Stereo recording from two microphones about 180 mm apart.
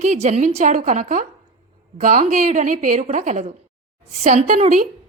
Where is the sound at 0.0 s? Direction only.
40° right (ahead or behind).